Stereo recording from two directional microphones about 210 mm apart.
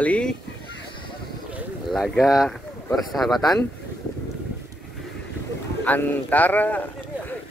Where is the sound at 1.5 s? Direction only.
Centre (ahead or behind).